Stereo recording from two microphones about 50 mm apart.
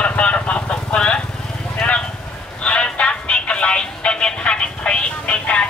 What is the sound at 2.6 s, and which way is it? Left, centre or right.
Music, left.